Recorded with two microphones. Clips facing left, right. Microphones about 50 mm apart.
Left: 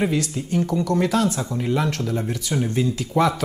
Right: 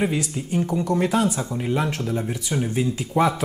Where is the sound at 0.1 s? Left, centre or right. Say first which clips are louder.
Left 2 dB; centre.